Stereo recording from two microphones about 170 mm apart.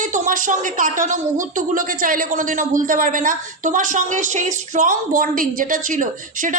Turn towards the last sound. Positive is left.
turn(degrees=-50)  # may be behind; listen again after turning